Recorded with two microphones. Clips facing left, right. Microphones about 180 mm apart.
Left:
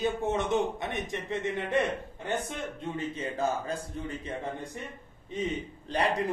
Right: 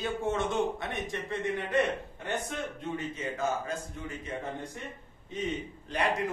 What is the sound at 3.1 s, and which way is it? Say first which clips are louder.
A man's voice: left 2 dB; 35° left (ahead or behind).